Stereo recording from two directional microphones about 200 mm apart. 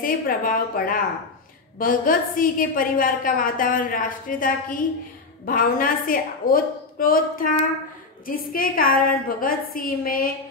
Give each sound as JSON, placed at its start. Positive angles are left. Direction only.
{"t": 0.0, "sound": "a woman's voice", "side_deg": 45}